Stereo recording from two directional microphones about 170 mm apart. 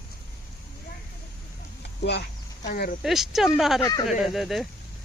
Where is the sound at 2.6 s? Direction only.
65° left (ahead or behind).